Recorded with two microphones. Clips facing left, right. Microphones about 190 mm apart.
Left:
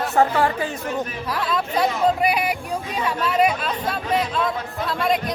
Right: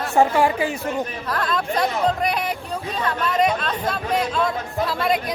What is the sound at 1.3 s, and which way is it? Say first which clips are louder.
Speech: even; 5° left (ahead or behind).